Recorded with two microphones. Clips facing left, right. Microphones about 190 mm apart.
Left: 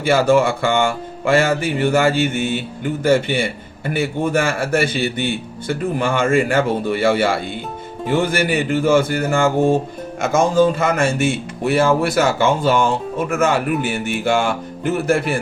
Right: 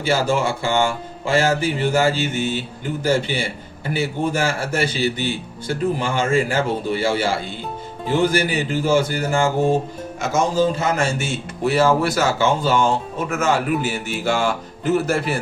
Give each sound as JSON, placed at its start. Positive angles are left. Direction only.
{"t": 0.0, "sound": "speech", "side_deg": 55}